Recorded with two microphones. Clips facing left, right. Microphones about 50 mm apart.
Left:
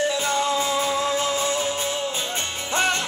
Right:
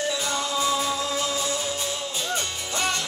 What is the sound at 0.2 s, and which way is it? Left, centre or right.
Music, left.